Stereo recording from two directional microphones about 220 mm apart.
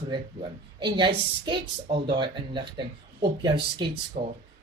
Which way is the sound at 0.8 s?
20° right (ahead or behind).